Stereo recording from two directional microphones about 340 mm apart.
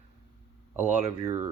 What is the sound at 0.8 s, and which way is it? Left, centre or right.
Speech, centre.